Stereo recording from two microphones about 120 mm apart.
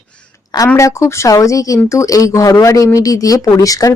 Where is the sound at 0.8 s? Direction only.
25° left (ahead or behind).